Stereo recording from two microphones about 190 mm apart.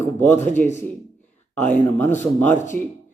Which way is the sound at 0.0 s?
10° left (ahead or behind).